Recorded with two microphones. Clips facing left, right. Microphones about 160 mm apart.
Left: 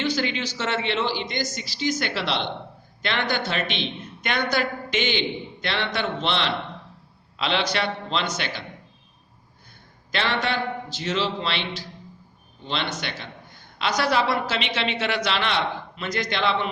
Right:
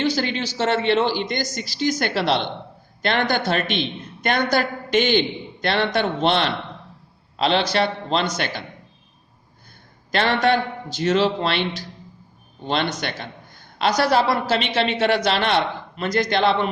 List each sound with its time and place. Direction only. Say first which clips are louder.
0.0 s a man's voice: right 3 dB; 35° right (ahead or behind)
10.1 s a man's voice: right 7 dB; 45° right (ahead or behind)